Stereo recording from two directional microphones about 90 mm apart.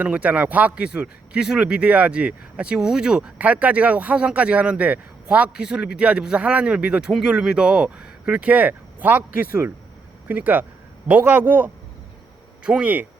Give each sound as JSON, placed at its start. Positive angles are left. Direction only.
{"t": 0.0, "sound": "a man's voice", "side_deg": -15}